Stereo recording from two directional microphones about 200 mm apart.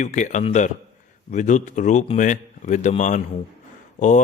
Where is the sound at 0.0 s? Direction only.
40° left (ahead or behind).